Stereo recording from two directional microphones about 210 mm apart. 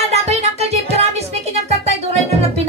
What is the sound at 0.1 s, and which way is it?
Music, 30° right (ahead or behind).